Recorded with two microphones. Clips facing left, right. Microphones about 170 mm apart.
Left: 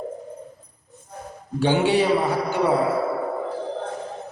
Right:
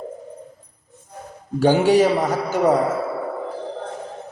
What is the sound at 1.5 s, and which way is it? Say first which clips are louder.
A man's voice: right 4 dB; 40° right (ahead or behind).